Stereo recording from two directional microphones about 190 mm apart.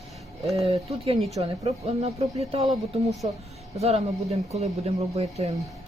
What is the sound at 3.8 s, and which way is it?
Speech, 35° right (ahead or behind).